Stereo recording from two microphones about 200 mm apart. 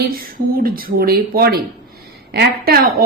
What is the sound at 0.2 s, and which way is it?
Speech, 45° right (ahead or behind).